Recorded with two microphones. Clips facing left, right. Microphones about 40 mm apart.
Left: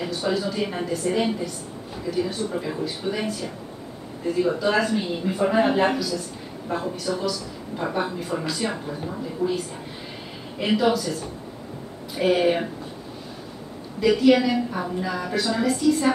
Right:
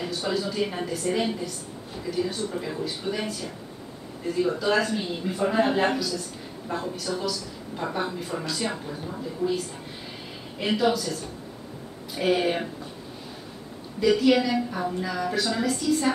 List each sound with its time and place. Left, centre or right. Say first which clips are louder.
0.0 s a woman's voice: left 3 dB; centre
2.5 s a woman's voice: left 3 dB; centre
4.4 s a woman's voice: left 2 dB; centre
9.4 s a woman's voice: left 2 dB; left
10.6 s a woman's voice: left 3 dB; centre
12.2 s a woman's voice: left 4 dB; centre
13.9 s a woman's voice: left 3 dB; centre